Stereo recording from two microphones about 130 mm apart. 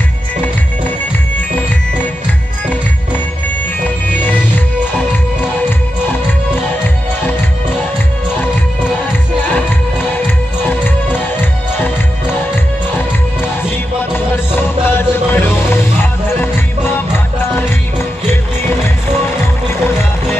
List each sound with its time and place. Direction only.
10.1 s music: 15° left (ahead or behind)
14.1 s music: 15° left (ahead or behind)